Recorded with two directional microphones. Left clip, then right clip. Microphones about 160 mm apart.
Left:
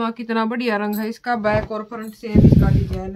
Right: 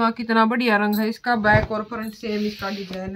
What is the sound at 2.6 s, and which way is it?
Speech, 20° left (ahead or behind).